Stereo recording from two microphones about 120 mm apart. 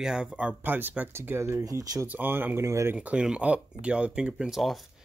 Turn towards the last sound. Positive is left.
turn(degrees=0)  # may be behind; listen again after turning